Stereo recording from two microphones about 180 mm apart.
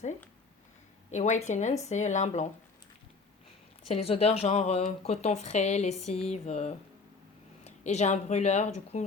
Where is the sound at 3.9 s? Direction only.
35° left (ahead or behind).